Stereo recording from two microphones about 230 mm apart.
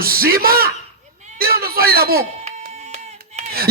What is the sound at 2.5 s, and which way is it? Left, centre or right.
Clapping, right.